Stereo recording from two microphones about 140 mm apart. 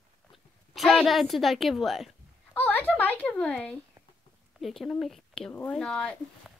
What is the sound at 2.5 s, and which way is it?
A woman's voice, 15° left (ahead or behind).